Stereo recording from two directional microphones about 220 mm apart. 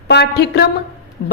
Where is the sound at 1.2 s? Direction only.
50° left (ahead or behind).